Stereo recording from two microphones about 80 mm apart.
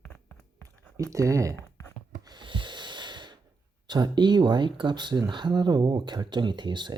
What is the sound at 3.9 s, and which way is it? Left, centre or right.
Speech, right.